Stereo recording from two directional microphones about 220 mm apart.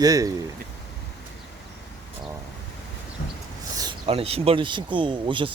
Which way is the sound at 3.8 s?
20° right (ahead or behind).